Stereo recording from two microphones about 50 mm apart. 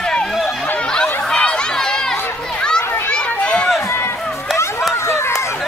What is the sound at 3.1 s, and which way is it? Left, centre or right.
Run, left.